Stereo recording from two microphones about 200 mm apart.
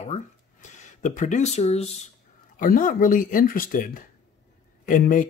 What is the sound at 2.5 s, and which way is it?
Speech, 45° left (ahead or behind).